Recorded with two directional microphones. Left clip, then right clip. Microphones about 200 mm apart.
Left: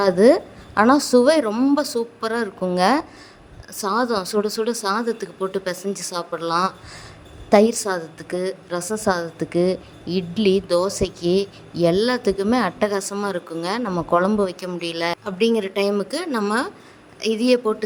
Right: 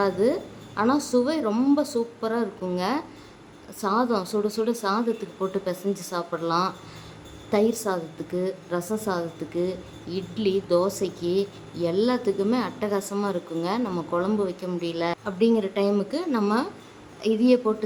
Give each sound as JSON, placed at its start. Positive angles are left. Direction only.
{"t": 0.0, "sound": "a woman's voice", "side_deg": 35}